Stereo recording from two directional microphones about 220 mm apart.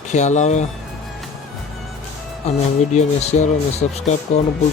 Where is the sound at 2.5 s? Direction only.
30° left (ahead or behind).